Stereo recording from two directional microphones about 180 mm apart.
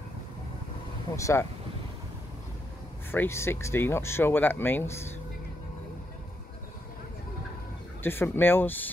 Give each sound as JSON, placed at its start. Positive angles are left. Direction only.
{"t": 1.1, "sound": "speech", "side_deg": 15}
{"t": 3.1, "sound": "speech", "side_deg": 15}
{"t": 8.0, "sound": "speech", "side_deg": 10}